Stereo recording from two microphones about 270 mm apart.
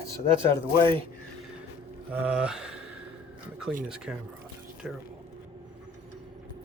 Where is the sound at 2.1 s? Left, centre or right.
Centre.